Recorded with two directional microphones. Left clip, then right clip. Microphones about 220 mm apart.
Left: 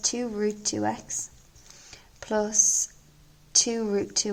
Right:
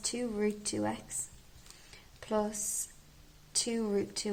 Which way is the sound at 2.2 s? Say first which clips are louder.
Left 9 dB; 45° left (ahead or behind).